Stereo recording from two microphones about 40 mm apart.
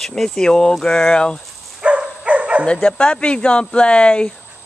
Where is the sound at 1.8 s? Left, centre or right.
Right.